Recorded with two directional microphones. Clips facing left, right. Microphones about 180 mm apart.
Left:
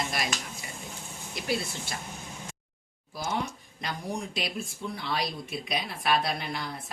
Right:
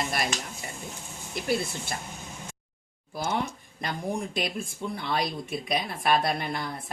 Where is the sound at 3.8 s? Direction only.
50° right (ahead or behind).